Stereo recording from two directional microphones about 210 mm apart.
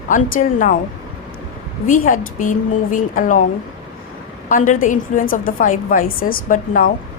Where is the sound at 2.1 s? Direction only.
40° left (ahead or behind).